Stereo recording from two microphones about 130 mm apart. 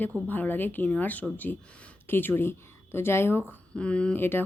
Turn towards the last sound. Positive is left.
turn(degrees=15)  # may be behind; listen again after turning